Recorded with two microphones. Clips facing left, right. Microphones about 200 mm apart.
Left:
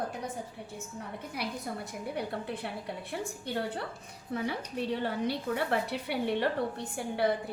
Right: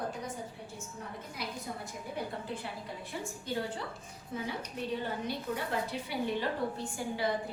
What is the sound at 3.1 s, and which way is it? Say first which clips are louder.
A woman's voice: even; 60° left (ahead or behind).